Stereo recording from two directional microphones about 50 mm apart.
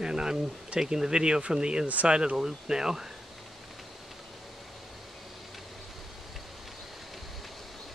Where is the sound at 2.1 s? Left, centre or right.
Centre.